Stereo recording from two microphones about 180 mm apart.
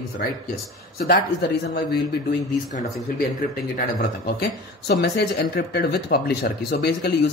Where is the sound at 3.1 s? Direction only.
60° left (ahead or behind).